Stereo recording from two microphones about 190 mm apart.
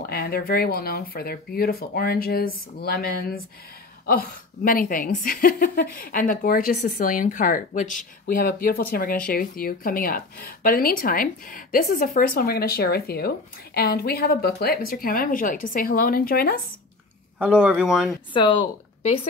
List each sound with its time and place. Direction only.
0.1 s a woman's voice: 55° left (ahead or behind)
17.4 s speech: 5° right (ahead or behind)
18.3 s speech: 25° left (ahead or behind)